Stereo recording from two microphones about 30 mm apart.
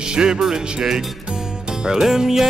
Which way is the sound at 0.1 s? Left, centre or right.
Right.